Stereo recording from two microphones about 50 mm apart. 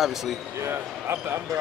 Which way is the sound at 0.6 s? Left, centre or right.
Right.